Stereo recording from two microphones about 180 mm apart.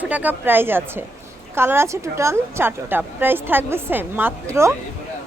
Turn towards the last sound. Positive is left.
turn(degrees=-15)  # may be behind; listen again after turning